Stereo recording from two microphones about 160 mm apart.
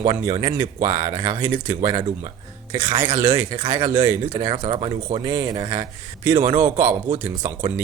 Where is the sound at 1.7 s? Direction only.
30° right (ahead or behind).